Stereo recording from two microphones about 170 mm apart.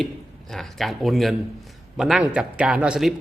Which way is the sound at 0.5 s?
Centre (ahead or behind).